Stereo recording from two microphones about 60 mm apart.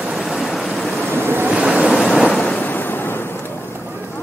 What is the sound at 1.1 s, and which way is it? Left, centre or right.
Waves, right.